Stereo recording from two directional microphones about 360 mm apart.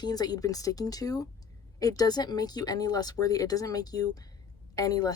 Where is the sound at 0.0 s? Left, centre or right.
Centre.